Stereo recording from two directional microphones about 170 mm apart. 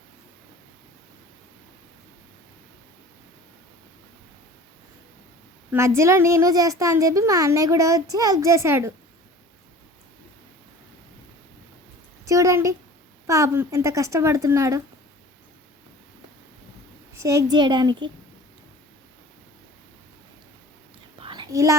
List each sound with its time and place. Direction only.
5.7 s a child's voice: 15° right (ahead or behind)
12.2 s a sound: 20° right (ahead or behind)
13.2 s speech: 20° right (ahead or behind)
17.2 s a child's voice: 15° right (ahead or behind)
21.2 s whispering: 30° right (ahead or behind)